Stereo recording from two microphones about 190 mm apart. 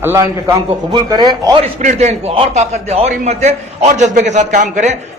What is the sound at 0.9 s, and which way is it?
Speech, 25° right (ahead or behind).